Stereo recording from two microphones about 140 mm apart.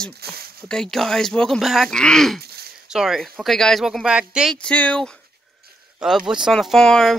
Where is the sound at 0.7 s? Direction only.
5° left (ahead or behind).